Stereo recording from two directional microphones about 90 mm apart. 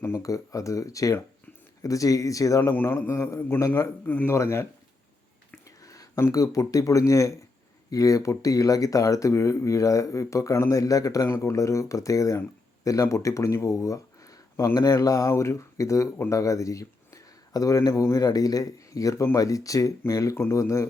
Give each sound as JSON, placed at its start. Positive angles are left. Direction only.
{"t": 0.0, "sound": "speech", "side_deg": 35}
{"t": 2.7, "sound": "a man's voice", "side_deg": 25}
{"t": 5.8, "sound": "speech", "side_deg": 40}